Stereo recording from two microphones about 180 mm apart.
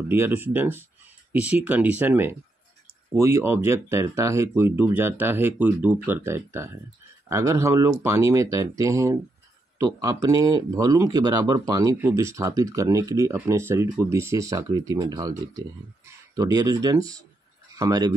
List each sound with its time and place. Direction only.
0.1 s speech: 10° right (ahead or behind)